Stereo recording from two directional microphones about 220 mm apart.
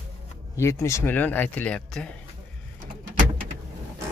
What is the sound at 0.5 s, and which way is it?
Speech, 10° left (ahead or behind).